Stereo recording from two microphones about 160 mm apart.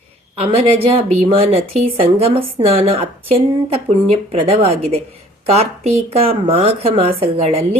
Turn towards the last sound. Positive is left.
turn(degrees=-40)  # may be behind; listen again after turning